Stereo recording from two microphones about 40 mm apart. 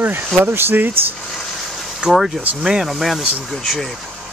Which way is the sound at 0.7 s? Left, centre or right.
Right.